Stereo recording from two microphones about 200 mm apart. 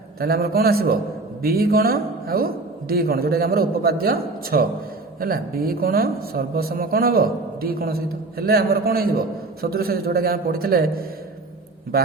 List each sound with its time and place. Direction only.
0.2 s speech: 50° right (ahead or behind)